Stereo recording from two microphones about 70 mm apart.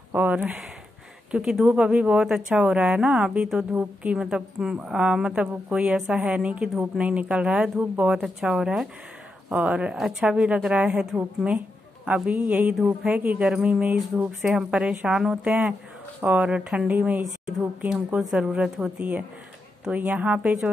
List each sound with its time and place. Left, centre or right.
0.1 s speech: right
1.3 s speech: centre